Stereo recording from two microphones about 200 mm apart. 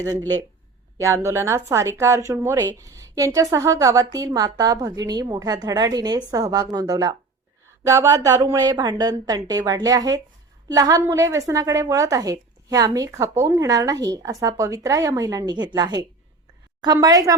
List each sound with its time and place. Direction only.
0.0 s a woman's voice: 15° right (ahead or behind)